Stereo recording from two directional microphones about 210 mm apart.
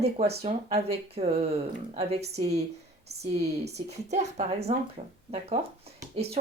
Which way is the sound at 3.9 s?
30° right (ahead or behind).